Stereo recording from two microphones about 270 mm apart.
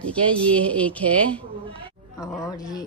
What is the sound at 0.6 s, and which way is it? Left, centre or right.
Speech, centre.